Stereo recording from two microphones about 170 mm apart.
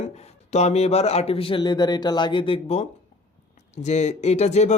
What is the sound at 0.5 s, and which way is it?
Speech, 40° left (ahead or behind).